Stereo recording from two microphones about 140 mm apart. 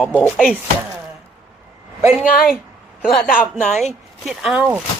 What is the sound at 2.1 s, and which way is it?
Speech, 5° right (ahead or behind).